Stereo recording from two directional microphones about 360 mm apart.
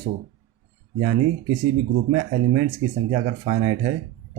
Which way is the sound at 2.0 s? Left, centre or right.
Right.